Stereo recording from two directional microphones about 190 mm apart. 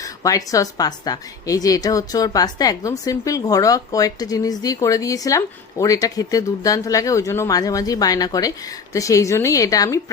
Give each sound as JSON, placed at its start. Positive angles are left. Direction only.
{"t": 0.0, "sound": "a woman's voice", "side_deg": 20}